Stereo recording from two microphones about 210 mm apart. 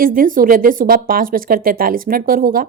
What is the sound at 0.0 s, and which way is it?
A woman's voice, 40° right (ahead or behind).